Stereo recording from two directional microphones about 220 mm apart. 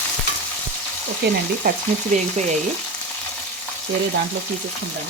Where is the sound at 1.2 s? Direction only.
50° right (ahead or behind).